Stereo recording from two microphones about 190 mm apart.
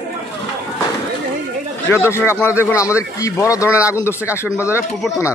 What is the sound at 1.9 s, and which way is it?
Speech, 15° left (ahead or behind).